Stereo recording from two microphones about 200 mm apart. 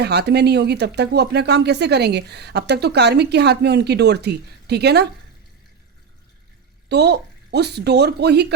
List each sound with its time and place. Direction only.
0.0 s speech: 55° right (ahead or behind)
6.8 s speech: 55° right (ahead or behind)